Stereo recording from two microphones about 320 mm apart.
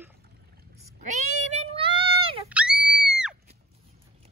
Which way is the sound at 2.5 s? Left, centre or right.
Centre.